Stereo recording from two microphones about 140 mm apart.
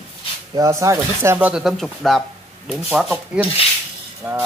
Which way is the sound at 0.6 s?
25° right (ahead or behind).